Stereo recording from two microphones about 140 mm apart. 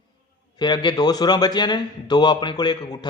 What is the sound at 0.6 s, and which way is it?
A man's voice, 30° left (ahead or behind).